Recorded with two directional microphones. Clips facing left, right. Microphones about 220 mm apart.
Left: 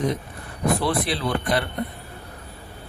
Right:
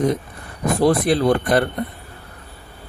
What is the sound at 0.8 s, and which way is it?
Speech, 45° right (ahead or behind).